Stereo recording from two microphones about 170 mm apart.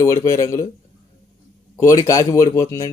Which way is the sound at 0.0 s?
20° left (ahead or behind).